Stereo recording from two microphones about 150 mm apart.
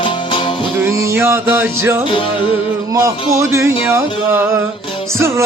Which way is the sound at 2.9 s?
20° right (ahead or behind).